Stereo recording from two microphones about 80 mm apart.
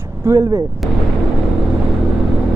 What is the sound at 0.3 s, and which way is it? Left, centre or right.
Speech, right.